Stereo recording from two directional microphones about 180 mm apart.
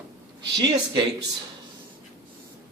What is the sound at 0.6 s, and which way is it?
Speech, 25° right (ahead or behind).